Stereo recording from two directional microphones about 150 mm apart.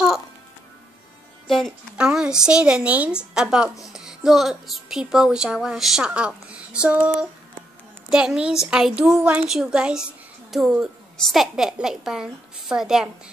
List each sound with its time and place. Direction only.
1.5 s a woman's voice: centre (ahead or behind)